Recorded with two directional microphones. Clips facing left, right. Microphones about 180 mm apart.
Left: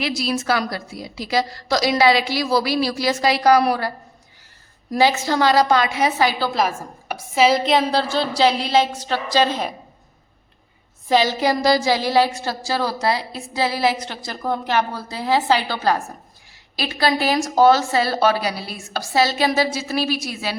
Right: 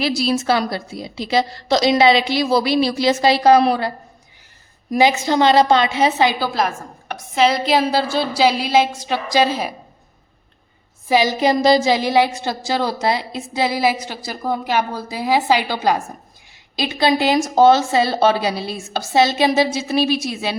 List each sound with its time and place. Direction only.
0.0 s a woman's voice: 30° right (ahead or behind)
6.4 s a woman's voice: centre (ahead or behind)
11.1 s a woman's voice: 15° right (ahead or behind)